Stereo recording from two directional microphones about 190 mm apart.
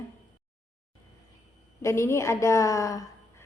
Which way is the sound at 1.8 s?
15° left (ahead or behind).